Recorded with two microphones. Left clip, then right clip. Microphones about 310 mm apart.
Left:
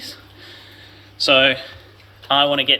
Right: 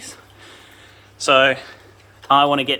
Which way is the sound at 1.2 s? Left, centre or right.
Centre.